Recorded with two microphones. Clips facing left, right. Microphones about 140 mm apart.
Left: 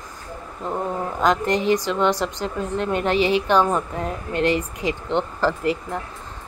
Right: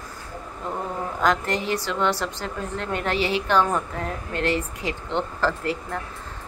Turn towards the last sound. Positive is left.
turn(degrees=15)  # may be behind; listen again after turning